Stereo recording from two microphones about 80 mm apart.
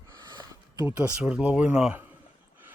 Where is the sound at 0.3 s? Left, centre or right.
Right.